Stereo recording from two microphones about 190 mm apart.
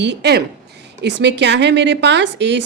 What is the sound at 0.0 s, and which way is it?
A woman's voice, 65° right (ahead or behind).